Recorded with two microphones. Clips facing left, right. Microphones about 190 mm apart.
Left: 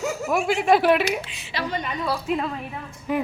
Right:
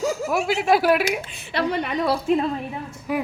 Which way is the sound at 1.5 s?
65° right (ahead or behind).